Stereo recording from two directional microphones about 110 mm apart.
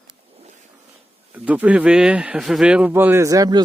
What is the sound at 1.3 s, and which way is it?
Speech, 10° right (ahead or behind).